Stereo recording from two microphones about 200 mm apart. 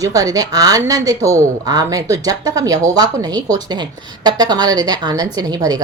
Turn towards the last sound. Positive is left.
turn(degrees=-20)  # may be behind; listen again after turning